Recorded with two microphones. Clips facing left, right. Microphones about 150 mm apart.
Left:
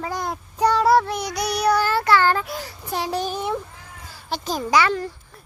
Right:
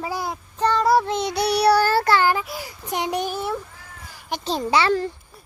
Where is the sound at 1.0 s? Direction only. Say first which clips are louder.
Right 3 dB; 25° right (ahead or behind).